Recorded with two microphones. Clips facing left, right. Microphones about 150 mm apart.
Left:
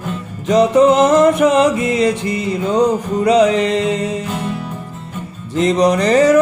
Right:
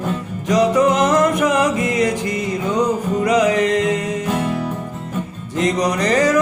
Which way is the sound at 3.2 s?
30° left (ahead or behind).